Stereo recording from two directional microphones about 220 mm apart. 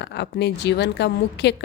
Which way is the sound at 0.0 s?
50° left (ahead or behind).